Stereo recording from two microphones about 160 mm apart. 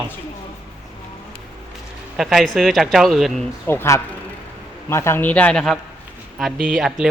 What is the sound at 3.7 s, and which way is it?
A man's voice, 15° left (ahead or behind).